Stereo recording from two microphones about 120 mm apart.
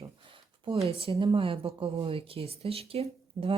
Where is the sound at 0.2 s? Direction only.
45° right (ahead or behind).